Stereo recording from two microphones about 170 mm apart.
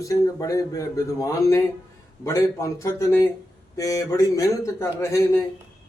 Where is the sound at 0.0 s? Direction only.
20° left (ahead or behind).